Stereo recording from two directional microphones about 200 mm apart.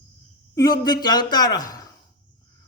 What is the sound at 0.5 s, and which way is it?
Speech, 20° left (ahead or behind).